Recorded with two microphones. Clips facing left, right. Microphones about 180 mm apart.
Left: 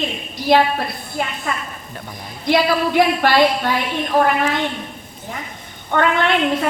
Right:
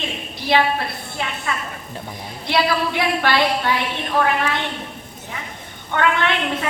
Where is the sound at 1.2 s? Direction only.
50° left (ahead or behind).